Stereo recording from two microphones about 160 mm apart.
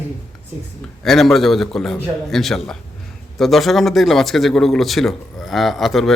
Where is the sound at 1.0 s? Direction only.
Centre (ahead or behind).